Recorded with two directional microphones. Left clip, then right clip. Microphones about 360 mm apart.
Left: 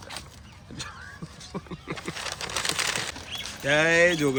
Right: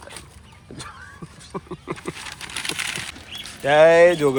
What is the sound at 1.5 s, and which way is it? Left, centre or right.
Speech, centre.